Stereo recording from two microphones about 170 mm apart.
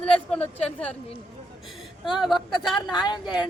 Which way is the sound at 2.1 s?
Centre (ahead or behind).